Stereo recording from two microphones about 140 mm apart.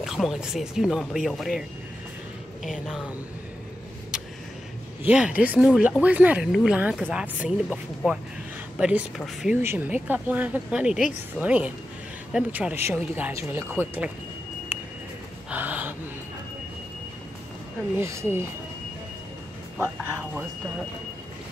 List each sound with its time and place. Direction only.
0.0 s speech: centre (ahead or behind)
2.6 s speech: 5° right (ahead or behind)
5.0 s speech: 10° right (ahead or behind)
9.6 s speech: 15° right (ahead or behind)
15.5 s gasp: 15° right (ahead or behind)
18.0 s speech: 20° right (ahead or behind)